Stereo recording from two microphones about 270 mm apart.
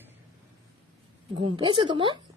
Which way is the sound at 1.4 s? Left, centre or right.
Centre.